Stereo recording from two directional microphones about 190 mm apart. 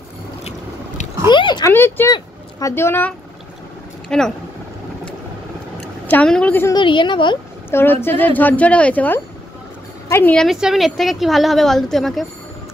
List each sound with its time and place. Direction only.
0.4 s boat: 35° left (ahead or behind)
1.3 s a sound: 25° left (ahead or behind)
1.7 s a woman's voice: 10° left (ahead or behind)
6.0 s speech: 5° left (ahead or behind)
6.7 s a woman's voice: 25° left (ahead or behind)
7.7 s a woman's voice: 10° left (ahead or behind)